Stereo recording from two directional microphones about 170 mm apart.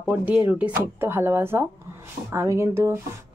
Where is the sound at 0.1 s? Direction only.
10° right (ahead or behind).